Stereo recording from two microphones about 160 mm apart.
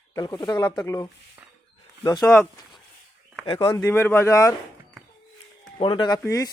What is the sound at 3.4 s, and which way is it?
Speech, 30° left (ahead or behind).